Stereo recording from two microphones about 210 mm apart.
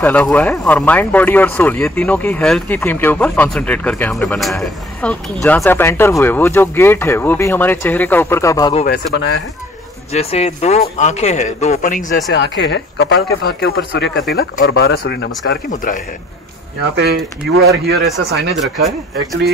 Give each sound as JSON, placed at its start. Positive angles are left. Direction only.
{"t": 0.0, "sound": "speech", "side_deg": 5}
{"t": 8.8, "sound": "speech", "side_deg": 55}
{"t": 10.1, "sound": "speech", "side_deg": 30}
{"t": 12.3, "sound": "speech", "side_deg": 55}
{"t": 13.4, "sound": "speech", "side_deg": 50}
{"t": 16.9, "sound": "speech", "side_deg": -50}
{"t": 18.0, "sound": "speech", "side_deg": 0}